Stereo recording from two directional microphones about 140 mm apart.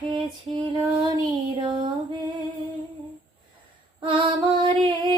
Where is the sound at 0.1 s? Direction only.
35° right (ahead or behind).